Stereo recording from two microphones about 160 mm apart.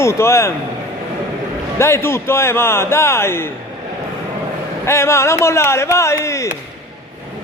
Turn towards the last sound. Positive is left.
turn(degrees=20)  # may be behind; listen again after turning